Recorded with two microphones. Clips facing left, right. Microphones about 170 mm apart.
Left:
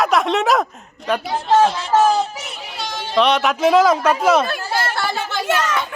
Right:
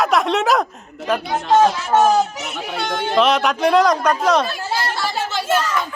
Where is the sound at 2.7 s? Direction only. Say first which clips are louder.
Right 6 dB; 55° right (ahead or behind).